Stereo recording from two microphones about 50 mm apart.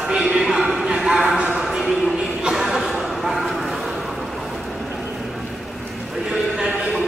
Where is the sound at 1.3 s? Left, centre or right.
Right.